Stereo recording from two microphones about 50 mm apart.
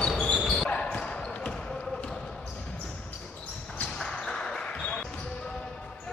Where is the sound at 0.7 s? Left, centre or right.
Centre.